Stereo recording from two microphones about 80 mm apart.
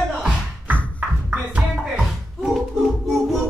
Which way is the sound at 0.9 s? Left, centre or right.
Centre.